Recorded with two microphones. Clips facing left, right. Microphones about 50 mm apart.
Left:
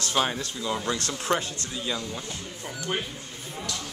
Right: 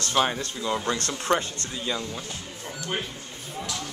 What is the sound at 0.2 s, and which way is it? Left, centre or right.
Speech, centre.